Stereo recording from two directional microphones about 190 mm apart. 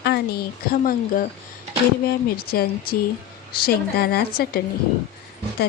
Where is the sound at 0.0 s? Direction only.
55° left (ahead or behind).